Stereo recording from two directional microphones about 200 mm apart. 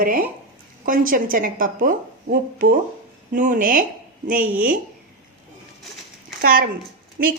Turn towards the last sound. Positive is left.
turn(degrees=-45)  # may be behind; listen again after turning